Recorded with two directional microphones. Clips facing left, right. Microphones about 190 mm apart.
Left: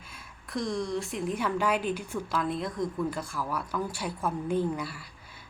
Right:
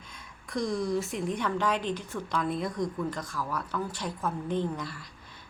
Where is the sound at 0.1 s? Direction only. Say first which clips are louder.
Right 1 dB; centre (ahead or behind).